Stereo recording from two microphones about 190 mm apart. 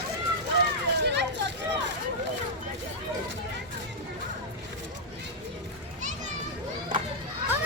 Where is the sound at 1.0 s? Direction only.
65° right (ahead or behind).